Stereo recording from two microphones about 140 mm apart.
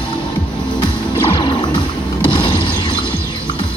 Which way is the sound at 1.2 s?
35° left (ahead or behind).